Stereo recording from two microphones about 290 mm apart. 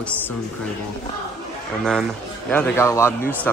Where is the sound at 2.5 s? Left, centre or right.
Centre.